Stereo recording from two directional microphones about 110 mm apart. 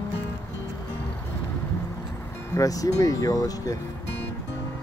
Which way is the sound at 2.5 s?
30° left (ahead or behind).